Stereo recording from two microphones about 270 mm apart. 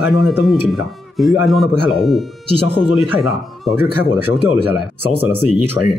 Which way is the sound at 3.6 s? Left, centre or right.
Centre.